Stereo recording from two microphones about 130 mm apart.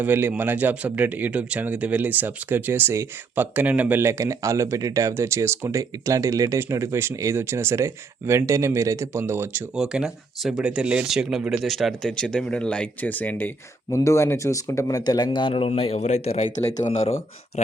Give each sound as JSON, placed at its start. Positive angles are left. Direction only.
{"t": 0.0, "sound": "speech", "side_deg": -15}
{"t": 9.7, "sound": "speech", "side_deg": -5}